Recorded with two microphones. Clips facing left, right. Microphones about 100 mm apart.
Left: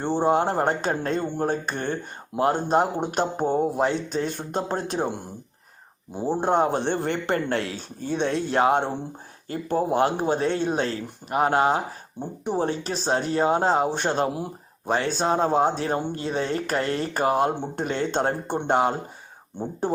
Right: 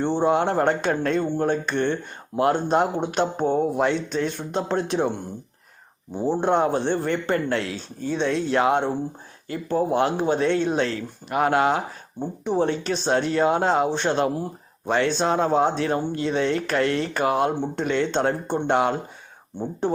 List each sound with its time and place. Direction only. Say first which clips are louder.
0.2 s speech: even; 40° left (ahead or behind)
3.4 s speech: right 1 dB; 10° left (ahead or behind)
3.8 s speech: right 1 dB; 35° left (ahead or behind)
6.1 s speech: right 2 dB; 15° left (ahead or behind)
6.4 s speech: even; 40° left (ahead or behind)
6.7 s speech: right 2 dB; 50° left (ahead or behind)